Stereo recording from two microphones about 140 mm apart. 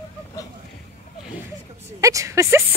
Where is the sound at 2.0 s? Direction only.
20° right (ahead or behind).